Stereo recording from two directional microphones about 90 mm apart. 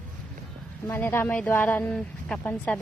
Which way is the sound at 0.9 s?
25° left (ahead or behind).